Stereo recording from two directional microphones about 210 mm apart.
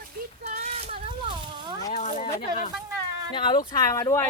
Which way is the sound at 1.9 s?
35° left (ahead or behind).